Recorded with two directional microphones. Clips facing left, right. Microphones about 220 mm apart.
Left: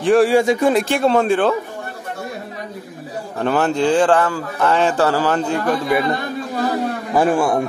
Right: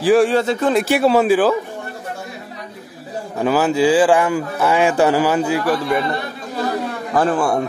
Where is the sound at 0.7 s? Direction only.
5° right (ahead or behind).